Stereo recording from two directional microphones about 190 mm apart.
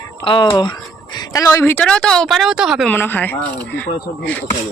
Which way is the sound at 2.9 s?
10° left (ahead or behind).